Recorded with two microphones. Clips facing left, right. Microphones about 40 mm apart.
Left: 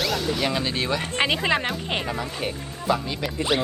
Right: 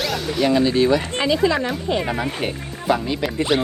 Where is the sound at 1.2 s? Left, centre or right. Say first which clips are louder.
Right 4 dB; left.